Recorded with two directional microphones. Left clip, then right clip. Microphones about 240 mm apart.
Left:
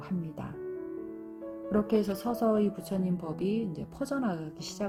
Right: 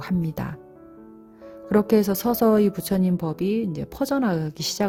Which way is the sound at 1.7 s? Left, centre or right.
Right.